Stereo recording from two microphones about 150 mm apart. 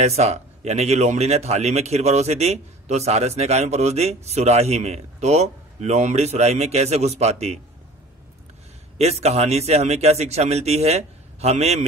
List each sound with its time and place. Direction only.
0.0 s a man's voice: 45° right (ahead or behind)
8.9 s a man's voice: 45° right (ahead or behind)